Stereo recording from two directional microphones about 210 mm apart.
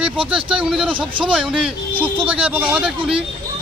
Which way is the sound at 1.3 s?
Centre (ahead or behind).